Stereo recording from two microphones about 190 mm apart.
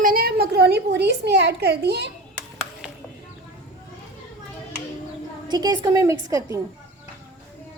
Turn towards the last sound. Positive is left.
turn(degrees=-15)  # may be behind; listen again after turning